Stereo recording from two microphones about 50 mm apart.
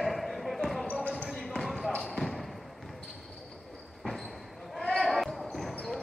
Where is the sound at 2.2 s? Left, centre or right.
Centre.